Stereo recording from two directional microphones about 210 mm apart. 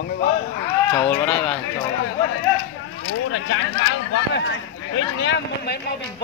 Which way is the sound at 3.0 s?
70° left (ahead or behind).